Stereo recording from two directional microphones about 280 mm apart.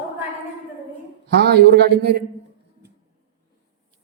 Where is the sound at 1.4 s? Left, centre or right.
Right.